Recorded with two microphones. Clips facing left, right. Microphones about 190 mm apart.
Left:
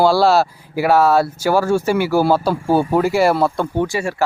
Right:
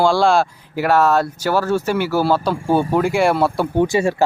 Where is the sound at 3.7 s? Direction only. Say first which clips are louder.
Right 3 dB; 20° right (ahead or behind).